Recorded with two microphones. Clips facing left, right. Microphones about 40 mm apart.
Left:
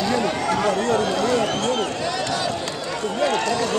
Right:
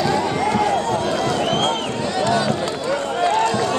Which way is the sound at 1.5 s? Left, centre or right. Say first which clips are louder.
Right 2 dB; right.